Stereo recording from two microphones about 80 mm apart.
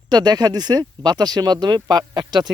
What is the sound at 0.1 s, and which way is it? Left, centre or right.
Speech, right.